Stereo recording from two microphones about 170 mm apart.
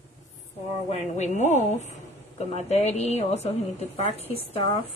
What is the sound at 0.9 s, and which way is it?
A woman's voice, 45° left (ahead or behind).